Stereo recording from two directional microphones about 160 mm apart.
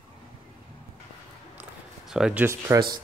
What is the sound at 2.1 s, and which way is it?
Speech, 5° right (ahead or behind).